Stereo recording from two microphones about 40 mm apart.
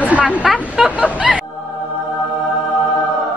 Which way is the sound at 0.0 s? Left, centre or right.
Right.